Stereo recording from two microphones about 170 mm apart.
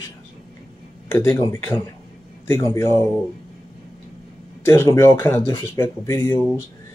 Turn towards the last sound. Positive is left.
turn(degrees=15)  # may be behind; listen again after turning